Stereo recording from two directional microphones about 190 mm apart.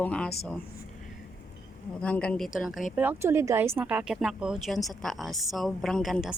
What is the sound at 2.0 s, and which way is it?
Speech, 5° left (ahead or behind).